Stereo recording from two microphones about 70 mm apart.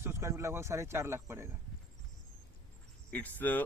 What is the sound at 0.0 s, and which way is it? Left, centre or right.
Speech, right.